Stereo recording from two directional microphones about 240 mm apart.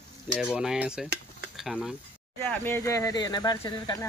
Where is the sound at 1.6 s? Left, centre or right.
Centre.